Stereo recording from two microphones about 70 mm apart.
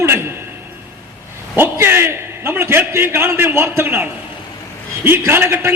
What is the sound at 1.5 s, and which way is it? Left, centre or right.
A man's voice, right.